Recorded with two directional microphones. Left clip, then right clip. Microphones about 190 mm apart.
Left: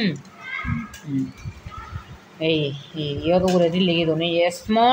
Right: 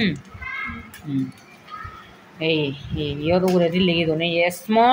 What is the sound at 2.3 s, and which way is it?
Speech, 10° right (ahead or behind).